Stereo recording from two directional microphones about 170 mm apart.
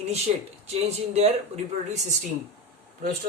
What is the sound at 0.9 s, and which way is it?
Speech, 40° right (ahead or behind).